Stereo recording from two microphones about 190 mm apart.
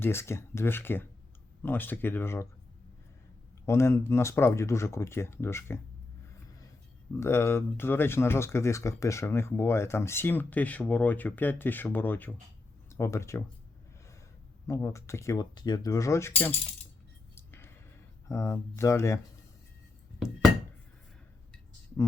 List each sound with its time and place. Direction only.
0.0 s speech: 15° left (ahead or behind)
3.7 s speech: 15° left (ahead or behind)
7.2 s speech: 15° left (ahead or behind)
14.7 s speech: 15° left (ahead or behind)
17.3 s a sound: 10° left (ahead or behind)
18.3 s speech: 15° left (ahead or behind)
20.1 s knock: centre (ahead or behind)